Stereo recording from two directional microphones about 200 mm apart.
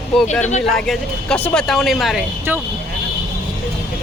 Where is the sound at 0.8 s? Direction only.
5° left (ahead or behind).